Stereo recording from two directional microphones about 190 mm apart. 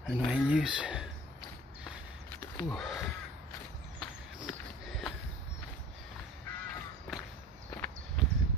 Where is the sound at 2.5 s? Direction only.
Centre (ahead or behind).